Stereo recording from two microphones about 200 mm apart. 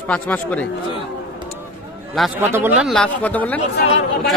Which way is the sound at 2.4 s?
10° right (ahead or behind).